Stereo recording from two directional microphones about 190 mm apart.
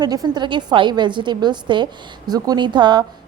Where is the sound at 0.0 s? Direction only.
20° right (ahead or behind).